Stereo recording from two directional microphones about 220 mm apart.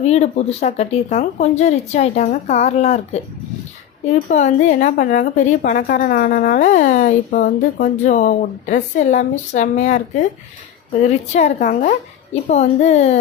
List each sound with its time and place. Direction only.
0.0 s a woman's voice: 30° left (ahead or behind)
11.3 s a woman's voice: 30° left (ahead or behind)